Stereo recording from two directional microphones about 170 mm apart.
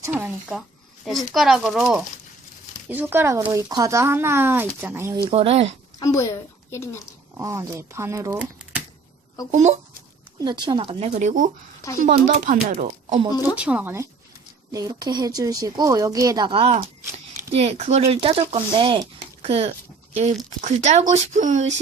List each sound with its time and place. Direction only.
0.0 s speech: 10° right (ahead or behind)
1.0 s speech: centre (ahead or behind)
5.3 s speech: 35° right (ahead or behind)
6.0 s a child's voice: 20° left (ahead or behind)
7.3 s speech: 20° right (ahead or behind)
9.5 s speech: 40° right (ahead or behind)
10.4 s speech: 25° right (ahead or behind)
11.1 s speech: 45° right (ahead or behind)
13.6 s speech: 10° right (ahead or behind); by 19.7 s 35° right (ahead or behind)
20.6 s speech: 45° right (ahead or behind)